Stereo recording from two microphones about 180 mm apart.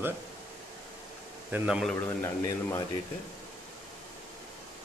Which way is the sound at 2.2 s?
20° left (ahead or behind).